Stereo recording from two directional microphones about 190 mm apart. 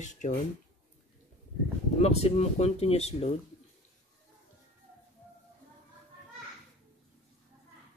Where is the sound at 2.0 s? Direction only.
35° left (ahead or behind).